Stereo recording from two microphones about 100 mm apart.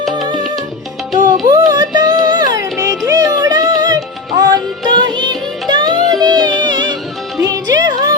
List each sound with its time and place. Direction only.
0.1 s music: 45° right (ahead or behind)
1.5 s a sound: 40° right (ahead or behind)
2.7 s music: 30° right (ahead or behind)